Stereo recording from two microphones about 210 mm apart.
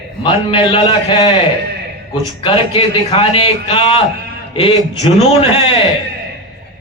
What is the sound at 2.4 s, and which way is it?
A man's voice, 25° left (ahead or behind).